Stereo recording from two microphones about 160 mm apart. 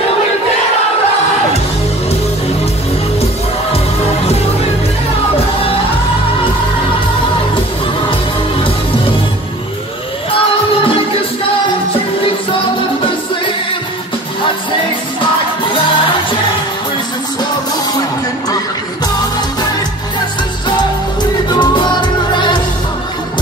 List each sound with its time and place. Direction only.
21.5 s music: 30° left (ahead or behind)